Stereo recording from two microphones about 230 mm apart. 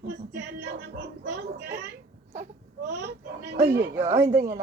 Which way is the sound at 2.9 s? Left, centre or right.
Right.